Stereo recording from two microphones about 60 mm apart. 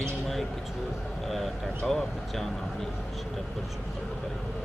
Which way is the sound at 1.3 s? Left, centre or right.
Centre.